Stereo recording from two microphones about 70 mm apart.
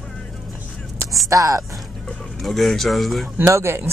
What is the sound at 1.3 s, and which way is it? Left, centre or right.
Speech, right.